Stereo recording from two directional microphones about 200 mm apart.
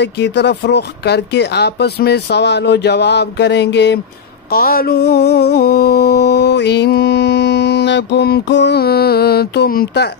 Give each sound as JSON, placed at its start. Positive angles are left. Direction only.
{"t": 0.0, "sound": "speech", "side_deg": 60}
{"t": 4.5, "sound": "music", "side_deg": 50}